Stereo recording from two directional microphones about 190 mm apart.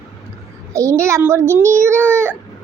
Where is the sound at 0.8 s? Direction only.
15° right (ahead or behind).